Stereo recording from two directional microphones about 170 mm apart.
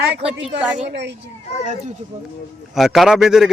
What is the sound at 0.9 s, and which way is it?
Speech, 90° right.